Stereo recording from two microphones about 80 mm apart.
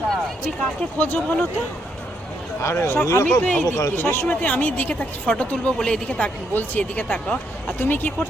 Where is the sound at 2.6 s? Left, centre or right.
Left; by 6.3 s centre.